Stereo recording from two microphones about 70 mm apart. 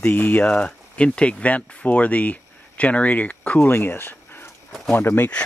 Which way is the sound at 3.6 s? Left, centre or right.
Left.